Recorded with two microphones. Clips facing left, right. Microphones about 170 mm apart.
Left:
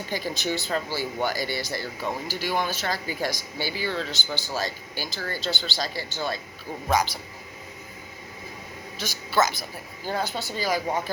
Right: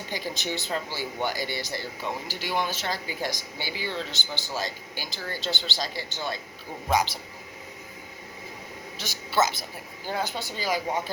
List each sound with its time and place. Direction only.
0.1 s speech: 20° right (ahead or behind)
9.0 s a woman's voice: 25° right (ahead or behind)